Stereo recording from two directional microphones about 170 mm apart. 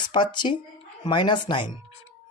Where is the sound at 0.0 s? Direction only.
25° left (ahead or behind).